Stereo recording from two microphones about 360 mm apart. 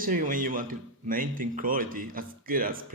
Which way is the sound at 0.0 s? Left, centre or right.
Right.